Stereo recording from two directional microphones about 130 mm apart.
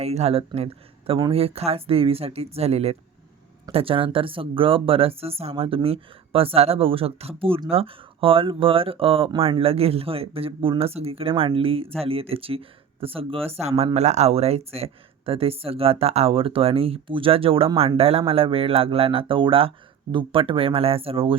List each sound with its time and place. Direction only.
0.0 s speech: 55° right (ahead or behind)